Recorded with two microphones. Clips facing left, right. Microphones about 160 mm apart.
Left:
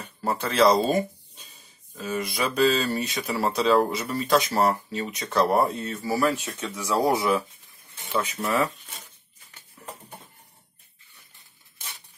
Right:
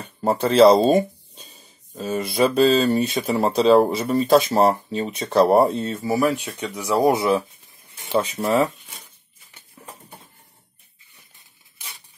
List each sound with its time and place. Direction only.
0.0 s speech: 25° right (ahead or behind)
8.1 s speech: 30° right (ahead or behind)
9.8 s a sound: 20° right (ahead or behind)